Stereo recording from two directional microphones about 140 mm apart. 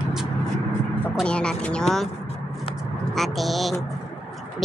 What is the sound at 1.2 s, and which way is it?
Speech, 5° left (ahead or behind).